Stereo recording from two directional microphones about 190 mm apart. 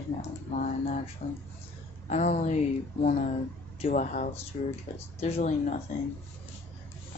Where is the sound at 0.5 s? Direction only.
40° left (ahead or behind).